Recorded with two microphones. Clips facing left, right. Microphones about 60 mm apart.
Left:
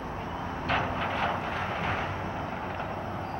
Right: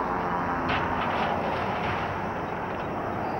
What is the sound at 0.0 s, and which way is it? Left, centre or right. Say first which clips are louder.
Vehicle: right 8 dB; right.